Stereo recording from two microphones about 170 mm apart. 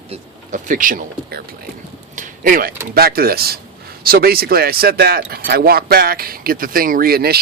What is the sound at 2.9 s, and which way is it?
Speech, 60° right (ahead or behind).